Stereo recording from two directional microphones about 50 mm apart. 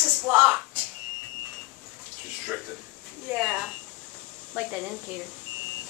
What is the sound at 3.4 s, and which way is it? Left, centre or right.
Speech, centre.